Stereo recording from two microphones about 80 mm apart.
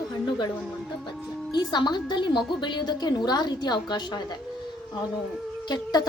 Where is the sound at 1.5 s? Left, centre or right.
Left.